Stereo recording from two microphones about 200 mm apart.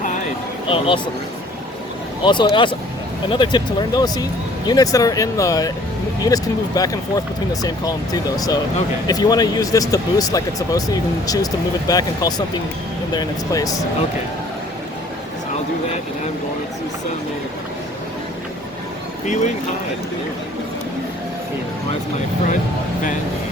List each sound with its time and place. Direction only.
0.7 s speech: 25° left (ahead or behind)
2.2 s speech: 25° left (ahead or behind)
19.2 s speech: 35° left (ahead or behind)